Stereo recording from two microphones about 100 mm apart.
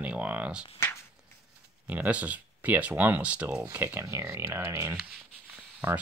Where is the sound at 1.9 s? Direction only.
15° right (ahead or behind).